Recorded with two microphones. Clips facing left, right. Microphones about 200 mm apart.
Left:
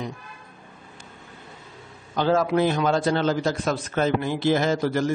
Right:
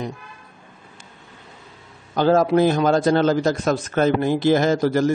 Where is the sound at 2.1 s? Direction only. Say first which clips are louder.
Right 5 dB; 40° right (ahead or behind).